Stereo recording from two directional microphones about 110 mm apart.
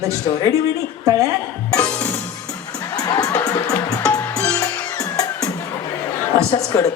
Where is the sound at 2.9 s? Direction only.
35° left (ahead or behind).